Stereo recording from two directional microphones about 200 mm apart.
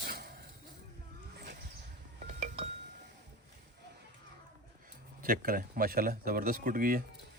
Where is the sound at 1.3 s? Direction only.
55° right (ahead or behind).